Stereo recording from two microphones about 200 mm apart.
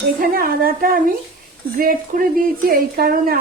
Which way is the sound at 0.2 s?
45° right (ahead or behind).